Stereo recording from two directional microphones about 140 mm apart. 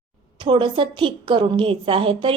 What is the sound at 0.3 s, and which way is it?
A woman's voice, 35° right (ahead or behind).